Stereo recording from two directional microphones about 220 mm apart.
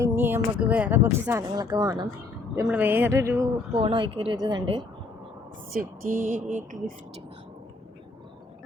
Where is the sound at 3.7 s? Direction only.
25° right (ahead or behind).